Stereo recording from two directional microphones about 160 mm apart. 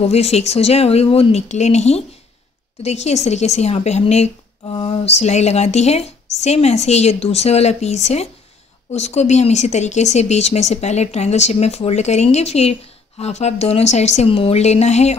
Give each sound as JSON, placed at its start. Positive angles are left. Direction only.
{"t": 0.0, "sound": "speech", "side_deg": 40}